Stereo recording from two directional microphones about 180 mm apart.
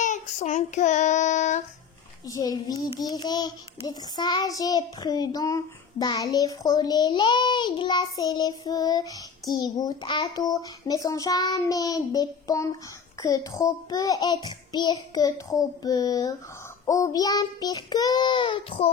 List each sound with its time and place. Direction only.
0.0 s child singing: 40° left (ahead or behind)
2.2 s a child's voice: 20° left (ahead or behind)